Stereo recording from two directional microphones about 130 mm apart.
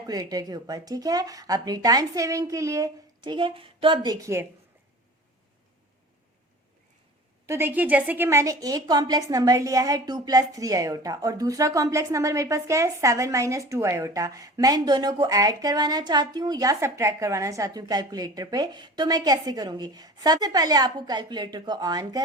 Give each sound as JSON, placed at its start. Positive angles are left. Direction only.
{"t": 0.0, "sound": "a woman's voice", "side_deg": -30}
{"t": 7.4, "sound": "a woman's voice", "side_deg": -20}